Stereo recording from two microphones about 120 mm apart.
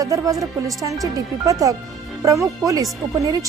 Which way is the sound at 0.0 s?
30° right (ahead or behind).